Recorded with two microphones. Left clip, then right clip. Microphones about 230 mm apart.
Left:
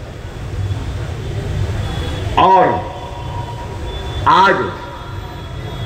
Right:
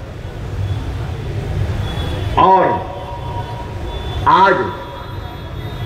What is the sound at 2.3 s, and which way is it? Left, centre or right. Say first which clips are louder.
Speech: left 1 dB; left.